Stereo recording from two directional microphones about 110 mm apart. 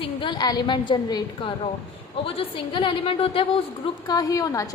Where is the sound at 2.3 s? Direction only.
55° left (ahead or behind).